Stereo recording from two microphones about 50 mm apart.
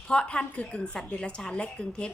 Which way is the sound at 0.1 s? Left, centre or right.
Left.